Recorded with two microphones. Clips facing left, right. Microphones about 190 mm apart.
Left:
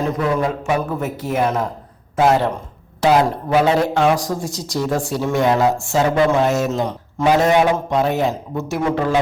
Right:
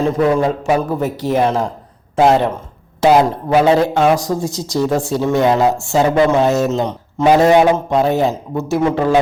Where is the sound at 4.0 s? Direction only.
25° right (ahead or behind).